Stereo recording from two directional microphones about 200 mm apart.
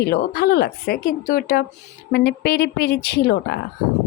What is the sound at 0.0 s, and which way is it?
A woman's voice, 50° left (ahead or behind).